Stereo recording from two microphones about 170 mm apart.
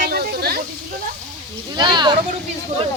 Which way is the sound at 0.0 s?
65° right (ahead or behind).